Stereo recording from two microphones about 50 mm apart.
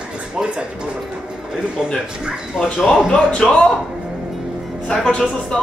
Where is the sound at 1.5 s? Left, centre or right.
Centre.